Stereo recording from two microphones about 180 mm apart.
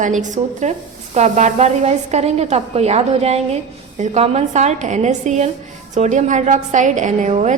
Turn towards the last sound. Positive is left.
turn(degrees=-40)  # may be behind; listen again after turning